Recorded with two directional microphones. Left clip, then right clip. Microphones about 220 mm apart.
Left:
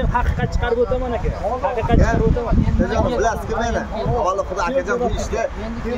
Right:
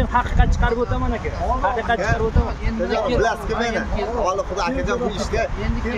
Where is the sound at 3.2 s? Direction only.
Centre (ahead or behind).